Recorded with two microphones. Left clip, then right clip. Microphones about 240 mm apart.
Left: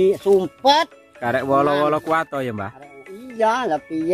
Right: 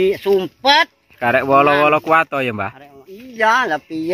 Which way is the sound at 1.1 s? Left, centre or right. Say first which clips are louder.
Right 5 dB; centre.